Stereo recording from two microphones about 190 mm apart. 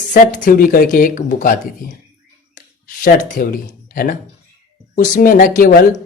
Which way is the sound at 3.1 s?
45° left (ahead or behind).